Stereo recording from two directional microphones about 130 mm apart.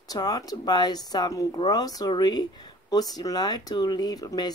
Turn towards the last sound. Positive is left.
turn(degrees=30)  # may be behind; listen again after turning